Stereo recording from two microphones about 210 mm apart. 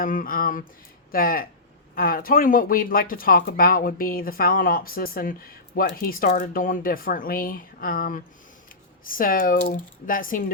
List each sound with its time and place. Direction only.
0.0 s speech: 40° left (ahead or behind)